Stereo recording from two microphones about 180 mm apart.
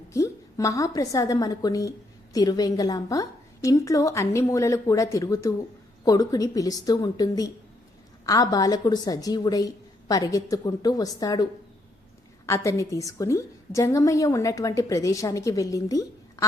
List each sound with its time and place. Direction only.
0.1 s a woman's voice: 15° left (ahead or behind)
12.5 s a woman's voice: 15° left (ahead or behind)